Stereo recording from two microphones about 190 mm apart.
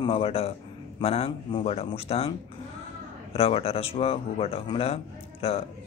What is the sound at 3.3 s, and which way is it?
A man's voice, 30° left (ahead or behind).